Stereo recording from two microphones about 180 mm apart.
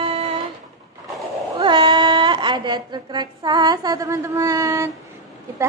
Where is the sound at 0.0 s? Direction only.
30° right (ahead or behind).